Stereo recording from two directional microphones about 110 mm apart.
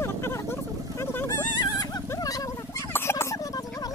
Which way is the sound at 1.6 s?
35° left (ahead or behind).